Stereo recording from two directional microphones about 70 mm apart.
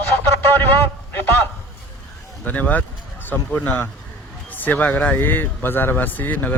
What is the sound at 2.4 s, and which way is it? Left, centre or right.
A man's voice, left.